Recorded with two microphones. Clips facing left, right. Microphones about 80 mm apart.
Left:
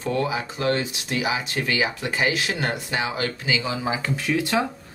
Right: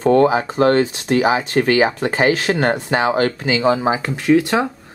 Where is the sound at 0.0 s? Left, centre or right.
Right.